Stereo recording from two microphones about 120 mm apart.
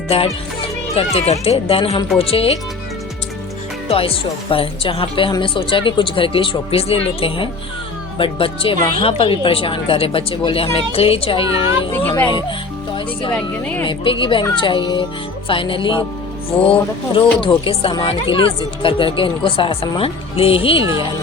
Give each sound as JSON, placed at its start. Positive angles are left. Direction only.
{"t": 0.1, "sound": "a woman's voice", "side_deg": 55}
{"t": 3.8, "sound": "a woman's voice", "side_deg": 50}
{"t": 11.9, "sound": "speech", "side_deg": 15}
{"t": 13.8, "sound": "a woman's voice", "side_deg": 45}
{"t": 17.2, "sound": "a woman's voice", "side_deg": 50}